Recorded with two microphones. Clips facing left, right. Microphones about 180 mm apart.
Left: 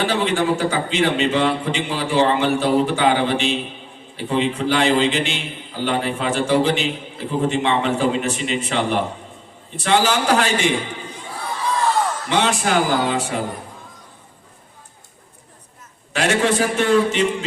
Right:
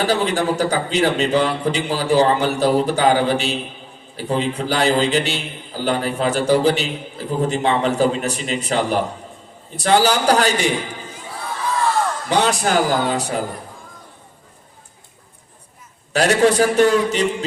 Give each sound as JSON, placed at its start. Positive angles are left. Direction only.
{"t": 0.0, "sound": "a man's voice", "side_deg": -40}
{"t": 12.3, "sound": "a man's voice", "side_deg": -40}
{"t": 16.1, "sound": "a man's voice", "side_deg": -40}